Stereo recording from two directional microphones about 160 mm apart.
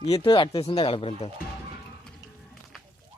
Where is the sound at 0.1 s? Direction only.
30° left (ahead or behind).